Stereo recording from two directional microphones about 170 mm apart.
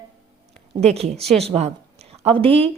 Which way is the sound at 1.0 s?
40° right (ahead or behind).